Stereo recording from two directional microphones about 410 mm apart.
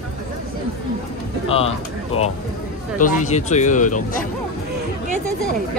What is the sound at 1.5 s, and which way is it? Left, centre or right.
Speech, centre.